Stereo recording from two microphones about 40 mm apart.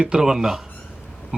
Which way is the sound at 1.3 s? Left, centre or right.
Right.